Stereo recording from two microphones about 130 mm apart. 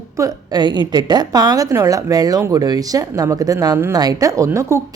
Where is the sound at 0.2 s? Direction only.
30° right (ahead or behind).